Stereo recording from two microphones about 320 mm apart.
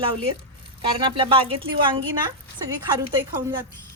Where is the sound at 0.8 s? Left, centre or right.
Centre.